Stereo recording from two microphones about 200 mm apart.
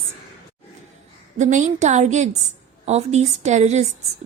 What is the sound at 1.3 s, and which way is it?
A woman's voice, 40° right (ahead or behind).